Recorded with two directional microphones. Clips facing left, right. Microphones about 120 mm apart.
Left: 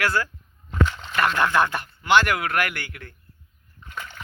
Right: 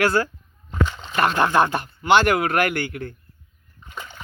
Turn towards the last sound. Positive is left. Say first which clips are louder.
# even
turn(degrees=-15)  # may be behind; listen again after turning